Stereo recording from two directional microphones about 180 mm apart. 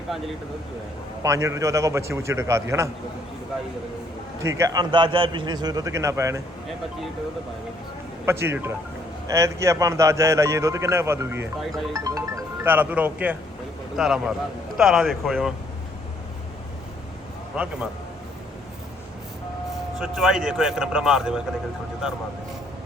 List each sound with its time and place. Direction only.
1.2 s speech: 15° right (ahead or behind)
4.4 s a man's voice: 15° right (ahead or behind)
8.2 s speech: 15° right (ahead or behind)
17.5 s speech: 5° right (ahead or behind)
20.0 s speech: centre (ahead or behind)